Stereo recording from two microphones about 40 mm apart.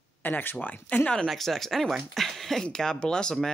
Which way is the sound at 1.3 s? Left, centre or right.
Centre.